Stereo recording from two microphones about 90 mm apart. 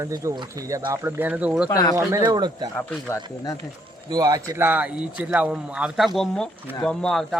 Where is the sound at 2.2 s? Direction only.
55° right (ahead or behind).